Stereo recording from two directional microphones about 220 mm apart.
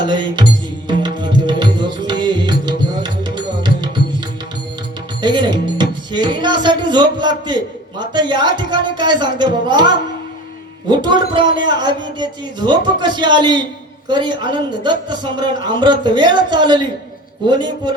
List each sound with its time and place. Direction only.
0.0 s music: 20° right (ahead or behind)
5.2 s music: 20° right (ahead or behind)